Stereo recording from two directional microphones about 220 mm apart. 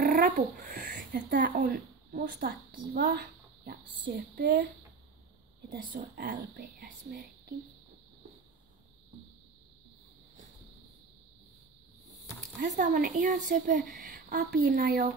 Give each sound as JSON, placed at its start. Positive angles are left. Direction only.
{"t": 0.0, "sound": "speech", "side_deg": -40}
{"t": 5.7, "sound": "speech", "side_deg": -40}
{"t": 12.7, "sound": "a woman's voice", "side_deg": -45}